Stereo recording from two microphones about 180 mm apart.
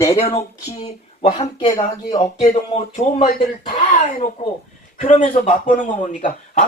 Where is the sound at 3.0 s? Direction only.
40° left (ahead or behind).